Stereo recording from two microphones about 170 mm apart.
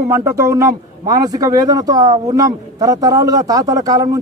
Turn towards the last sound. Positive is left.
turn(degrees=-20)  # may be behind; listen again after turning